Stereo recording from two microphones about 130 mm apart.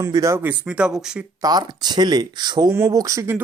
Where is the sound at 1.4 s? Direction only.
30° right (ahead or behind).